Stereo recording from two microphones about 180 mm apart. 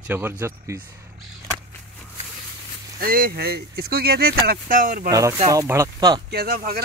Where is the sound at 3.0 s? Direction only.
55° right (ahead or behind).